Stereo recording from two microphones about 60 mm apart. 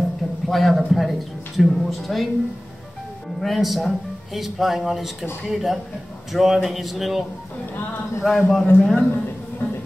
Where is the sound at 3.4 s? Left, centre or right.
Centre.